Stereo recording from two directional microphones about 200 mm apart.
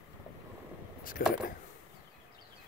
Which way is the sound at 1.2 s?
45° left (ahead or behind).